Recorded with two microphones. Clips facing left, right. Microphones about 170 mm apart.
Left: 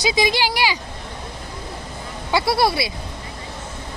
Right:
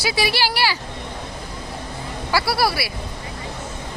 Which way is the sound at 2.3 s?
20° left (ahead or behind).